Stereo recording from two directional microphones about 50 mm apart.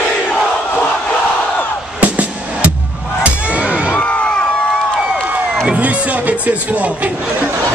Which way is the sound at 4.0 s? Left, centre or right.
Left.